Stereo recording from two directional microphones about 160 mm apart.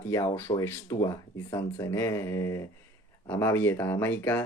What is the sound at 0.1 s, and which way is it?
Speech, 20° left (ahead or behind).